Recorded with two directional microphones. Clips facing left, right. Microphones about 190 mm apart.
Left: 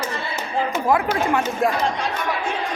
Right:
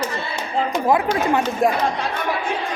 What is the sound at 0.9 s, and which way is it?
Speech, 20° right (ahead or behind).